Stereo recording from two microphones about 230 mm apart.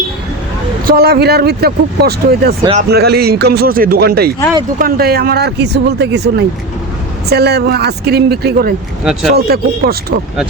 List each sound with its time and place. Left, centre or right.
0.9 s speech: right